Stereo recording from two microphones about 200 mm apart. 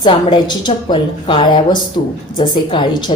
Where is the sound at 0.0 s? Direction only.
25° left (ahead or behind).